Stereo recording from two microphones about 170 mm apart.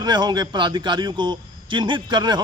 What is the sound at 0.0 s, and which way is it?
Speech, 25° right (ahead or behind).